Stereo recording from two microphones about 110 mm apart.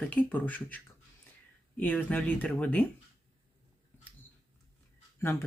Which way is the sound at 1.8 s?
15° left (ahead or behind).